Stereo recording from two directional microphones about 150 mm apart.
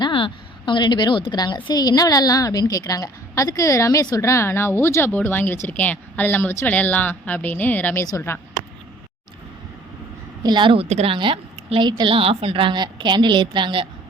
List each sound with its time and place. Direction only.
0.0 s a woman's voice: 35° left (ahead or behind)
10.4 s a woman's voice: 30° right (ahead or behind)